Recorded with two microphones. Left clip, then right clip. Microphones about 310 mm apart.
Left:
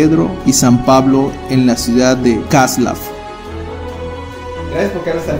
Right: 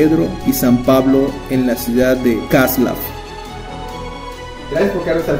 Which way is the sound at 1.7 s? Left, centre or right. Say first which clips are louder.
Even; left.